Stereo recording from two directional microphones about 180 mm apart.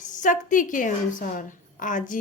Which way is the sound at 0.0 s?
45° left (ahead or behind).